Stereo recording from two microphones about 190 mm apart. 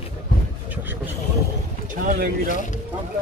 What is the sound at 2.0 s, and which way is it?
Speech, 50° right (ahead or behind).